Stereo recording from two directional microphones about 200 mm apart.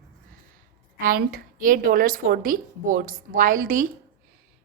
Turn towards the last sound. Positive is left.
turn(degrees=-45)  # may be behind; listen again after turning